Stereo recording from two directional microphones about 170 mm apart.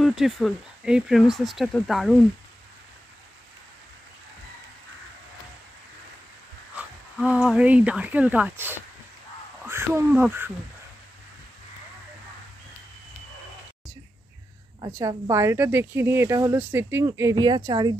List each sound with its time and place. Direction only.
0.0 s speech: centre (ahead or behind)
7.2 s speech: centre (ahead or behind)
14.9 s speech: 20° right (ahead or behind)